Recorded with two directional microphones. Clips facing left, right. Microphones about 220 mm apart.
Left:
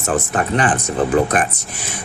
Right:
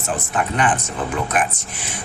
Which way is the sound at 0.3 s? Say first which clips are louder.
Even; 35° left (ahead or behind).